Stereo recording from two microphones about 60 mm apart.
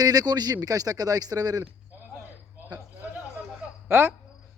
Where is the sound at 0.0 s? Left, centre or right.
Right.